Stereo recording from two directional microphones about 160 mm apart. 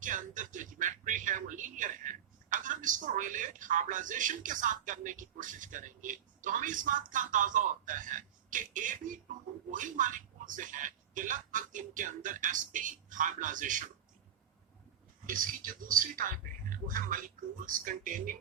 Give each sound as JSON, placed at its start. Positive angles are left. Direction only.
{"t": 0.0, "sound": "speech", "side_deg": -55}
{"t": 15.3, "sound": "speech", "side_deg": -60}